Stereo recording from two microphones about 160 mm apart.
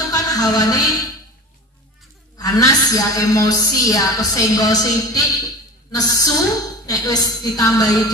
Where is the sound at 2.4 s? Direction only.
25° left (ahead or behind).